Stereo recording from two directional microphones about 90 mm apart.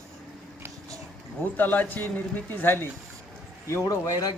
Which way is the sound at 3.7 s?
35° left (ahead or behind).